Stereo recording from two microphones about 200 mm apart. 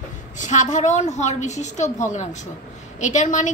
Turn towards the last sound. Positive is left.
turn(degrees=40)  # may be behind; listen again after turning